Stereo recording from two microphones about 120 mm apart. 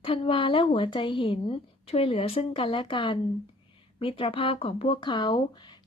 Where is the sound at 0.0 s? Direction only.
50° left (ahead or behind).